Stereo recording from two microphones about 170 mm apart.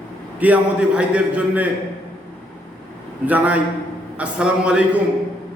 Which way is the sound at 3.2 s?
10° right (ahead or behind).